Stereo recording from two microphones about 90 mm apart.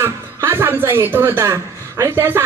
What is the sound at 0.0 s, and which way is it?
A man's voice, 25° right (ahead or behind).